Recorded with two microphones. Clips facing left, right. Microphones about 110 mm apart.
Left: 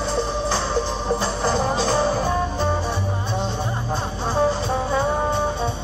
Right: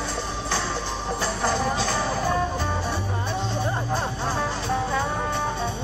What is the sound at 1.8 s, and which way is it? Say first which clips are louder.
Music: left 5 dB; 25° left (ahead or behind).